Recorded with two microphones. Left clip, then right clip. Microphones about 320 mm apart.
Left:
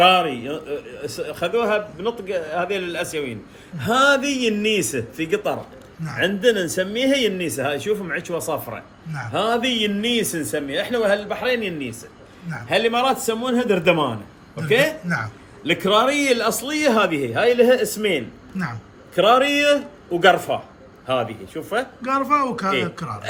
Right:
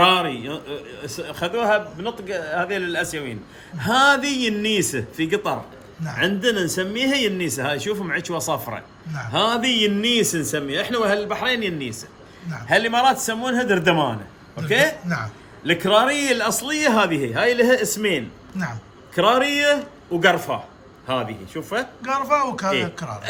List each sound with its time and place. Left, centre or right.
0.0 s a man's voice: right
15.0 s a man's voice: centre
15.6 s a man's voice: right
18.5 s speech: centre
19.1 s a man's voice: right
22.0 s a man's voice: centre